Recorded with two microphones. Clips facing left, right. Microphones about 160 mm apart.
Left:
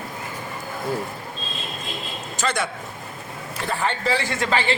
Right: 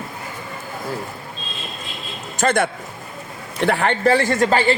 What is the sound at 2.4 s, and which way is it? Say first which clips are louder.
Speech: right 7 dB; 55° right (ahead or behind).